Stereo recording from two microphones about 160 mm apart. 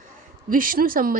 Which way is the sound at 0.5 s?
60° right (ahead or behind).